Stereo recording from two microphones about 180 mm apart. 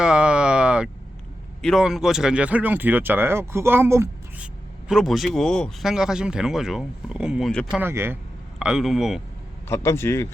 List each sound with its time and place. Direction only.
0.0 s a sound: 5° right (ahead or behind)
1.6 s speech: centre (ahead or behind)
4.9 s speech: centre (ahead or behind)
7.8 s speech: 15° right (ahead or behind)
9.6 s speech: 15° left (ahead or behind)